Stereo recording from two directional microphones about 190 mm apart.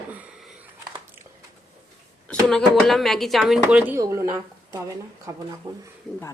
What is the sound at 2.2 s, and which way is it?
Speech, centre (ahead or behind).